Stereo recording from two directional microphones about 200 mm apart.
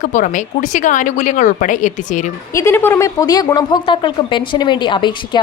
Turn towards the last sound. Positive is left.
turn(degrees=25)  # may be behind; listen again after turning